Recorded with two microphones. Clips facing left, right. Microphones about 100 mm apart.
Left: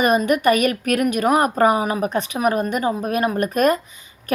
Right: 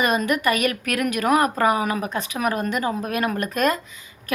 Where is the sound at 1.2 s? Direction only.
30° left (ahead or behind).